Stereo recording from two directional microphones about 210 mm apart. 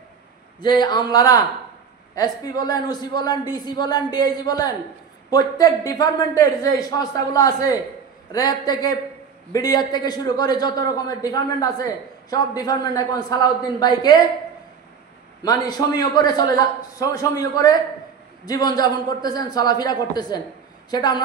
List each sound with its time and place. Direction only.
0.6 s a man's voice: 20° left (ahead or behind)
15.4 s a man's voice: 20° left (ahead or behind)